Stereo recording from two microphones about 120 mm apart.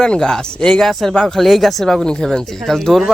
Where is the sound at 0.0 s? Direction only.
5° left (ahead or behind).